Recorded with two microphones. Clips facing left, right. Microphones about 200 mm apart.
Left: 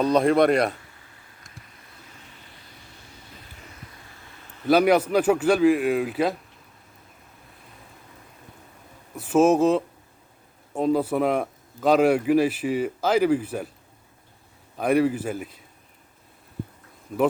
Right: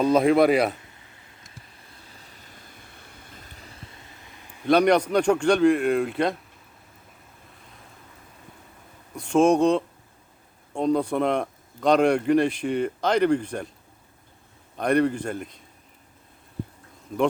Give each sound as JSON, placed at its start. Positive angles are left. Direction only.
{"t": 0.0, "sound": "a man's voice", "side_deg": 0}
{"t": 2.1, "sound": "vehicle", "side_deg": -40}
{"t": 4.6, "sound": "a man's voice", "side_deg": 5}
{"t": 9.1, "sound": "a man's voice", "side_deg": 5}
{"t": 14.8, "sound": "a man's voice", "side_deg": 5}